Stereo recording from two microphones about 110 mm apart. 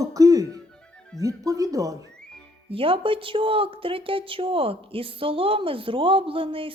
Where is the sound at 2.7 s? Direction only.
55° right (ahead or behind).